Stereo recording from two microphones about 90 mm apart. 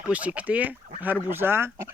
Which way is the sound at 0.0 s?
15° right (ahead or behind).